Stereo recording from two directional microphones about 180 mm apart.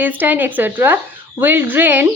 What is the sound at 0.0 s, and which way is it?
Speech, 10° right (ahead or behind).